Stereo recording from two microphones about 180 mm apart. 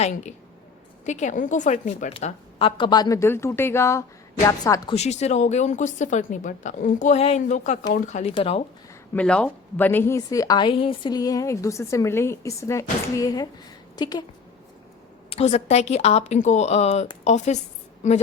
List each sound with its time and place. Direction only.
0.0 s a woman's voice: 40° left (ahead or behind); by 4.9 s 20° left (ahead or behind)
4.9 s a woman's voice: 35° left (ahead or behind)
9.1 s a woman's voice: 5° left (ahead or behind); by 14.3 s 25° left (ahead or behind)
15.3 s a woman's voice: 35° left (ahead or behind)